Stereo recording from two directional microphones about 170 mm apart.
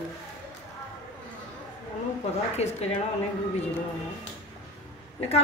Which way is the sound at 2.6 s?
40° left (ahead or behind).